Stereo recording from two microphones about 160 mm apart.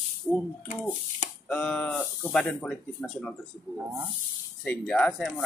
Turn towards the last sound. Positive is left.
turn(degrees=5)  # may be behind; listen again after turning